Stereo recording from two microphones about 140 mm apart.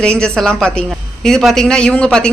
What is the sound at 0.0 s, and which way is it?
A man's voice, 5° left (ahead or behind).